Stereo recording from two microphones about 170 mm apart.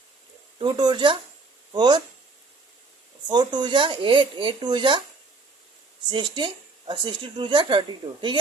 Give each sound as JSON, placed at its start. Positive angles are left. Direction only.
{"t": 0.6, "sound": "speech", "side_deg": -25}
{"t": 3.2, "sound": "speech", "side_deg": -25}
{"t": 6.1, "sound": "speech", "side_deg": -30}